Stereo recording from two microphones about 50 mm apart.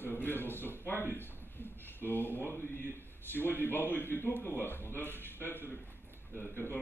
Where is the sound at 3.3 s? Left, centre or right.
Left.